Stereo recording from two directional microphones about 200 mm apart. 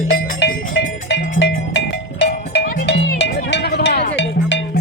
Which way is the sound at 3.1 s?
60° left (ahead or behind).